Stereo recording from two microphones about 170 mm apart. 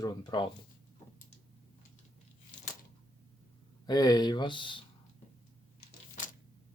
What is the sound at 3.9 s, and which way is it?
Speech, 25° left (ahead or behind).